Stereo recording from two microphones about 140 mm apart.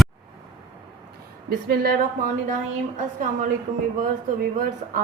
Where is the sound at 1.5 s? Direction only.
90° right.